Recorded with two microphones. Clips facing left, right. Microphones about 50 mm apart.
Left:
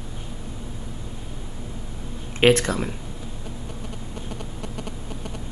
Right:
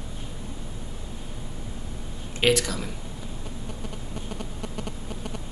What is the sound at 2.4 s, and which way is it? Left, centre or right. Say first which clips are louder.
Speech: left 5 dB; left.